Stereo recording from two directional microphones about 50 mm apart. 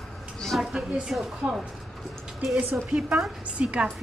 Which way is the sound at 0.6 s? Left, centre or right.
Centre.